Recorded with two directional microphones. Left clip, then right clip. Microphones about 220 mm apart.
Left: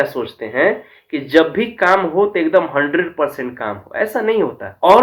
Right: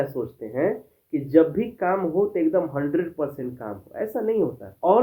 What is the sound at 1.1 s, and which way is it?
Speech, 5° left (ahead or behind).